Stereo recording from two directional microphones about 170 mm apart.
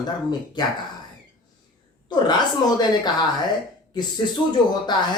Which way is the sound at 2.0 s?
25° left (ahead or behind).